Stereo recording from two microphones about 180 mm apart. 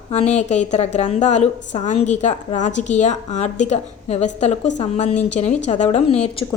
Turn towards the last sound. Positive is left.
turn(degrees=40)  # may be behind; listen again after turning